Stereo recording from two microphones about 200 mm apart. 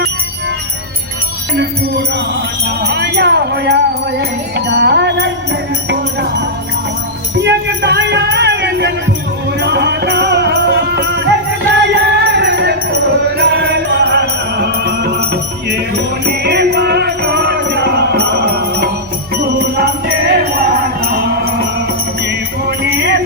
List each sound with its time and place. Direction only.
2.8 s music: 55° right (ahead or behind)
7.3 s music: 60° right (ahead or behind)
22.6 s music: 55° right (ahead or behind)